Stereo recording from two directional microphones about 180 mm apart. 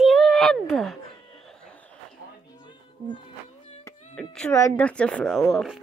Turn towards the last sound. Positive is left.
turn(degrees=0)  # may be behind; listen again after turning